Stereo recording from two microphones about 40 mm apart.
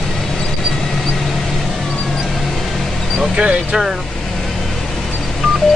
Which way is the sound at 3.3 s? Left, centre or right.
Right.